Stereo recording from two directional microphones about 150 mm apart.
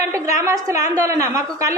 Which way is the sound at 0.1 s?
20° right (ahead or behind).